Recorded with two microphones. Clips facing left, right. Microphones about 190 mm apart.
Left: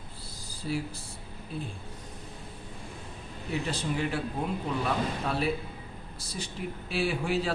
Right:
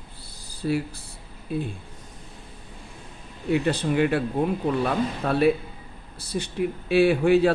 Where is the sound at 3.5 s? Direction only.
65° right (ahead or behind).